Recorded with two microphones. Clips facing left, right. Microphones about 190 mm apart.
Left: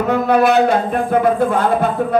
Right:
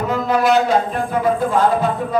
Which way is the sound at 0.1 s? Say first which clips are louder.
Left 3 dB; 60° left (ahead or behind).